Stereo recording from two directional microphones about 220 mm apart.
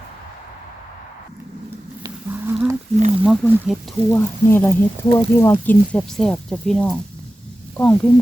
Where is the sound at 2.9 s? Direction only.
30° right (ahead or behind).